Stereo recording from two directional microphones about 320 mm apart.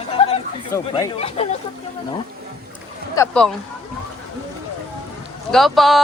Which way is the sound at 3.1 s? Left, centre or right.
Centre.